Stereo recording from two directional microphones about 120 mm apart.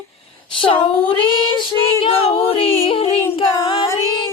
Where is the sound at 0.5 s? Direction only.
45° left (ahead or behind).